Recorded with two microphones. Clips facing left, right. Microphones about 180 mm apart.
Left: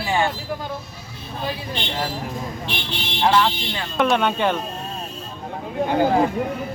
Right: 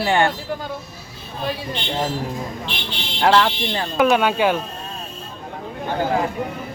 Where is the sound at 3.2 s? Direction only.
70° right (ahead or behind).